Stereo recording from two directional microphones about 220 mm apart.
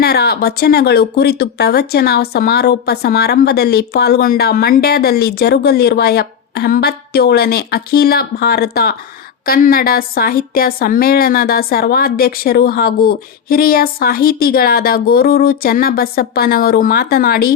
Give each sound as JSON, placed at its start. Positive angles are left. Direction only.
{"t": 0.0, "sound": "speech", "side_deg": 45}